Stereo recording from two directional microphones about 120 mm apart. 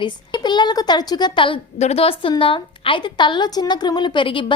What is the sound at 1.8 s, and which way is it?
A woman's voice, 60° left (ahead or behind).